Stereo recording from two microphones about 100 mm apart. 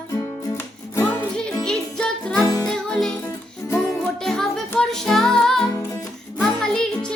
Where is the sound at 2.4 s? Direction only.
40° left (ahead or behind).